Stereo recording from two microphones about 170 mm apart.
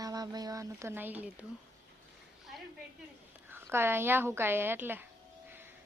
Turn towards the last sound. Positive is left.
turn(degrees=-10)  # may be behind; listen again after turning